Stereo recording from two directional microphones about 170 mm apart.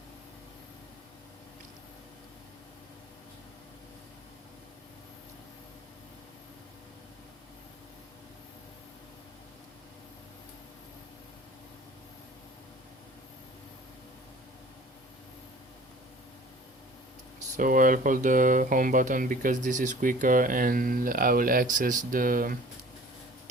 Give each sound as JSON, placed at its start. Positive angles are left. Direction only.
{"t": 17.6, "sound": "speech", "side_deg": -50}